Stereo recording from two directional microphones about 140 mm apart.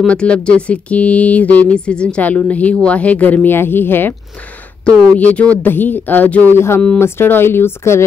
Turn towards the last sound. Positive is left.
turn(degrees=15)  # may be behind; listen again after turning